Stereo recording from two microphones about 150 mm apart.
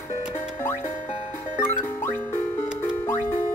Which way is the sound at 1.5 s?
15° left (ahead or behind).